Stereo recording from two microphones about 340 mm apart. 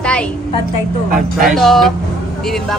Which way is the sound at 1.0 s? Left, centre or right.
Right.